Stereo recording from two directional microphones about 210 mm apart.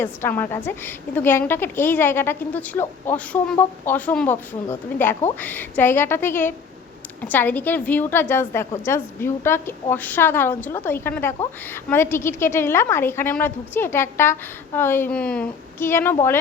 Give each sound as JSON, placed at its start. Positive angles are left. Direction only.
{"t": 0.0, "sound": "a woman's voice", "side_deg": 10}